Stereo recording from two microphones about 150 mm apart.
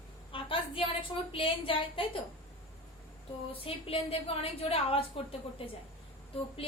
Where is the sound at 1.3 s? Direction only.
35° left (ahead or behind).